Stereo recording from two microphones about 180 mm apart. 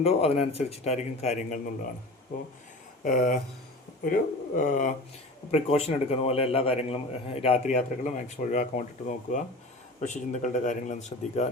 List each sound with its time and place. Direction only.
0.0 s a man's voice: 35° left (ahead or behind)
3.0 s a man's voice: 50° left (ahead or behind)